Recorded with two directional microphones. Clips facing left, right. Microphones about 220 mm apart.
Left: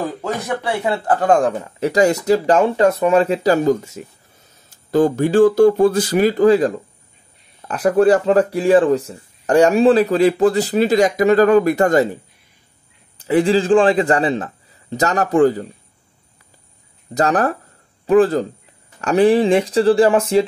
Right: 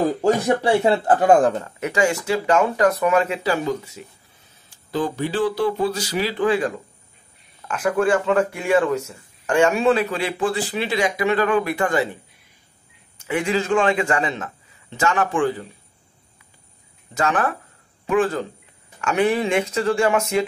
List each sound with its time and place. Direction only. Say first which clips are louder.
0.2 s speech: right 5 dB; 30° right (ahead or behind)
1.2 s speech: even; 5° right (ahead or behind)
1.8 s speech: left 8 dB; 35° left (ahead or behind)
13.2 s speech: left 7 dB; 35° left (ahead or behind)
17.1 s speech: left 5 dB; 40° left (ahead or behind)